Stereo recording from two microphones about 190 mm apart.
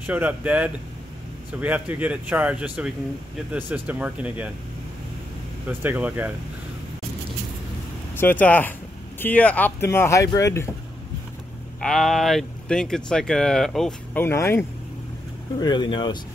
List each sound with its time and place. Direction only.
0.0 s speech: 10° right (ahead or behind)
5.7 s speech: 10° right (ahead or behind)
8.2 s speech: 10° left (ahead or behind)
11.8 s speech: centre (ahead or behind)
15.6 s speech: 25° left (ahead or behind)